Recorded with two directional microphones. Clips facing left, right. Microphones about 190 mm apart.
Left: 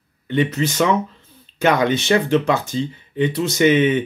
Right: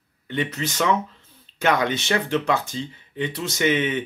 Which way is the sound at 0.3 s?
15° left (ahead or behind).